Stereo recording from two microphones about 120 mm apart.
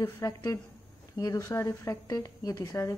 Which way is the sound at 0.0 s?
30° left (ahead or behind).